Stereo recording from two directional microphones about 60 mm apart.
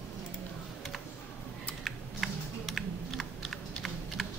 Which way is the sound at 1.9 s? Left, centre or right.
Centre.